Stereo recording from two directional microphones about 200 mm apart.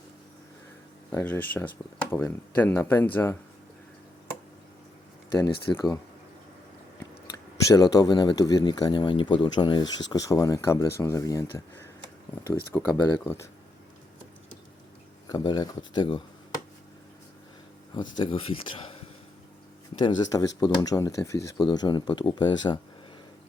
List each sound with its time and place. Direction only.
1.1 s speech: 10° left (ahead or behind)
5.3 s speech: 15° left (ahead or behind)
7.7 s speech: 20° left (ahead or behind)
12.7 s speech: 5° left (ahead or behind)
15.3 s speech: 20° left (ahead or behind)
18.2 s speech: 25° left (ahead or behind)
20.0 s speech: 25° left (ahead or behind)